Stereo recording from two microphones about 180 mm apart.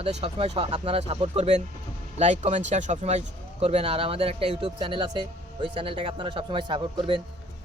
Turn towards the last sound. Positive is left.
turn(degrees=-25)  # may be behind; listen again after turning